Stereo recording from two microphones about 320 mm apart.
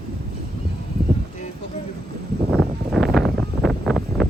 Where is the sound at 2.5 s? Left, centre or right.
Centre.